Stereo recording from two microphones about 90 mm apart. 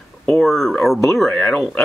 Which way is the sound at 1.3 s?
15° left (ahead or behind).